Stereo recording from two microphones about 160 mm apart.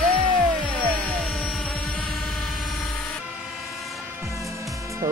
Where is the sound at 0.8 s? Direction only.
5° left (ahead or behind).